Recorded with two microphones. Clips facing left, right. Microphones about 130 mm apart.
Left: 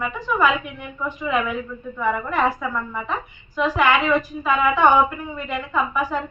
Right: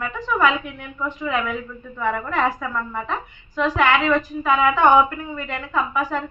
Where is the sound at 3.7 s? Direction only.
15° left (ahead or behind).